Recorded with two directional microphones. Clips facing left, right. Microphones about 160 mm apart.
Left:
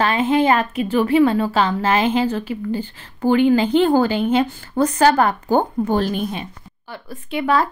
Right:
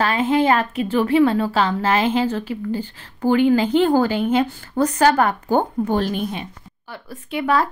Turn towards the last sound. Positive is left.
turn(degrees=25)  # may be behind; listen again after turning